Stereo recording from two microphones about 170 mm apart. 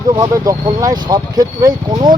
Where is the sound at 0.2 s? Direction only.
20° right (ahead or behind).